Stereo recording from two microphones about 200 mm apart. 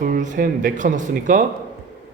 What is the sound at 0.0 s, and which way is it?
Speech, 40° right (ahead or behind).